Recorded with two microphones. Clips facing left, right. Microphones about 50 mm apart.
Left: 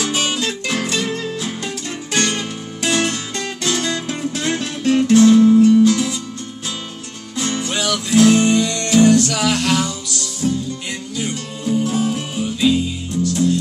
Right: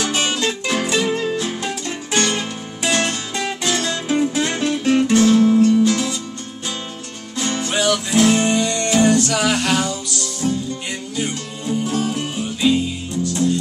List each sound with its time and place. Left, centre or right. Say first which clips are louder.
0.7 s music: right 3 dB; centre
7.3 s music: right 1 dB; centre